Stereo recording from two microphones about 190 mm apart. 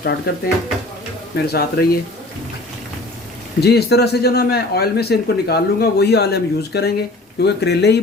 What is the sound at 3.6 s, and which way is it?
A man's voice, 60° left (ahead or behind).